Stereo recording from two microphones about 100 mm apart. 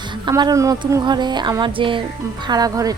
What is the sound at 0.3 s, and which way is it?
A woman's voice, 45° right (ahead or behind).